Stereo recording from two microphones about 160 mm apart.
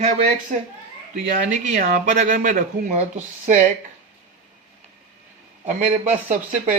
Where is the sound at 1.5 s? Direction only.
55° right (ahead or behind).